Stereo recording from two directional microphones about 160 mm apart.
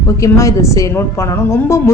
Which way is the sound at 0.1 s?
20° left (ahead or behind).